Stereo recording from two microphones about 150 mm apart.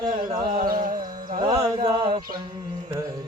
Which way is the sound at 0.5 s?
70° right (ahead or behind).